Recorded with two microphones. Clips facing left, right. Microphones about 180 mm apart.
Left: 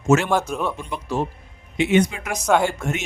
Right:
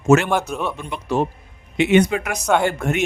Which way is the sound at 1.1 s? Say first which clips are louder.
Right 5 dB; 65° right (ahead or behind).